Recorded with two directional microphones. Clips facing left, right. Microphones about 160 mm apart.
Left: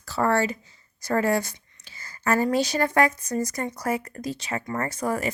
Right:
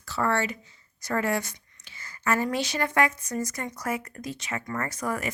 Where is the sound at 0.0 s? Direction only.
40° left (ahead or behind).